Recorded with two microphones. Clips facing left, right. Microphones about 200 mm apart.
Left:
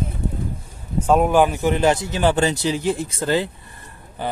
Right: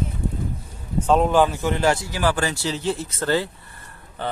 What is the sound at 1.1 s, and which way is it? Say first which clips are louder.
A man's voice: left 2 dB; 10° left (ahead or behind).